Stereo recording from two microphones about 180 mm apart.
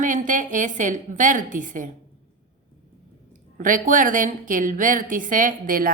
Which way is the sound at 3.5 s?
45° right (ahead or behind).